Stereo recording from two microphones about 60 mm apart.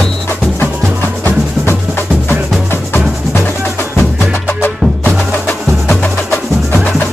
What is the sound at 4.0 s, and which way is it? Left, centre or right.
Music, left.